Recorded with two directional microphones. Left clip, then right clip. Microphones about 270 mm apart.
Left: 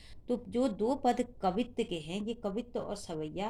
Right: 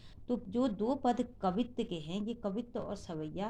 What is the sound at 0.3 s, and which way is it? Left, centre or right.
A woman's voice, left.